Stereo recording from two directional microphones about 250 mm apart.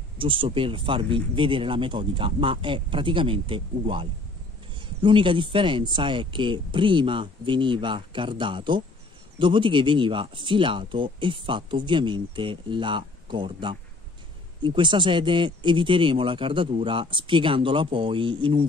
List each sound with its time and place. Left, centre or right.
0.2 s speech: centre